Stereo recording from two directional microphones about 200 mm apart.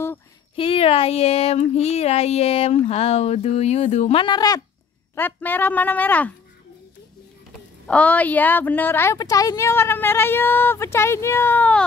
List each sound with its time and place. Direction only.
0.6 s speech: 30° left (ahead or behind)
5.1 s a woman's voice: 10° left (ahead or behind)
7.8 s a woman's voice: 5° left (ahead or behind)